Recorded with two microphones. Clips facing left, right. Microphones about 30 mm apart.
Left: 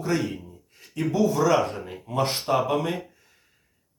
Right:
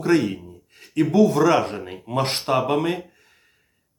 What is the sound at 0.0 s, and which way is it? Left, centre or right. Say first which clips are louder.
Speech: right 7 dB; right.